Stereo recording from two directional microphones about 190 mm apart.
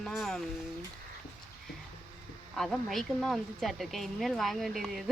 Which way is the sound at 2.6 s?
Centre (ahead or behind).